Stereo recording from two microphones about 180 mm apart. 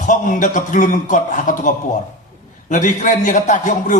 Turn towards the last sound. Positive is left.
turn(degrees=45)  # may be behind; listen again after turning